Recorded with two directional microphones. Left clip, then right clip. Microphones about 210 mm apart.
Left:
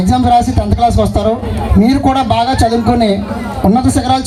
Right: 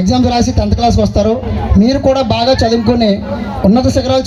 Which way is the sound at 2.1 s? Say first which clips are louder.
Right 1 dB; 45° right (ahead or behind).